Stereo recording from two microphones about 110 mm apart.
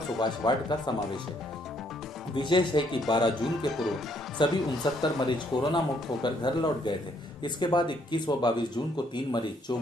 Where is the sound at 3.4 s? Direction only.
Centre (ahead or behind).